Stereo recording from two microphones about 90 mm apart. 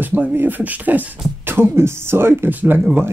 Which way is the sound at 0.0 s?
20° right (ahead or behind).